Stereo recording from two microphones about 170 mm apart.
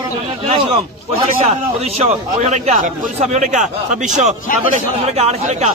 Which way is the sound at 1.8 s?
40° right (ahead or behind).